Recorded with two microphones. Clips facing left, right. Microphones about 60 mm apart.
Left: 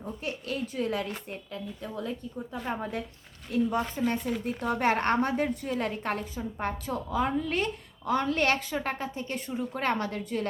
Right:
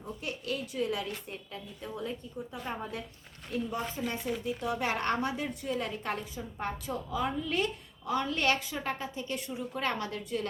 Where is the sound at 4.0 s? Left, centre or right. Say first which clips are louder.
Left 5 dB; left.